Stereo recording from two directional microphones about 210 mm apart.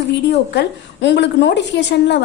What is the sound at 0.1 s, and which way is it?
A woman's voice, 55° left (ahead or behind).